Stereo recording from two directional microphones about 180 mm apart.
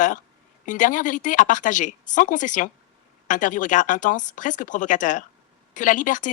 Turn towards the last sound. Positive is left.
turn(degrees=45)  # may be behind; listen again after turning